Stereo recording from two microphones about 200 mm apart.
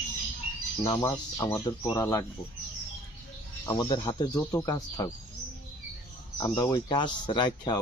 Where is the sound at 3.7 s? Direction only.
20° left (ahead or behind).